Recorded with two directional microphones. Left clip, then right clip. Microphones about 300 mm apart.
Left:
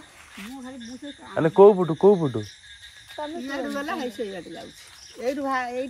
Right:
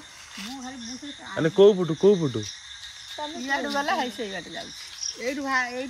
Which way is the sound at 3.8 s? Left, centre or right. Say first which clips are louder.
Right 3 dB; centre.